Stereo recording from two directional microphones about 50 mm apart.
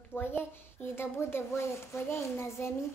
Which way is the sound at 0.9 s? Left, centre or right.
Left.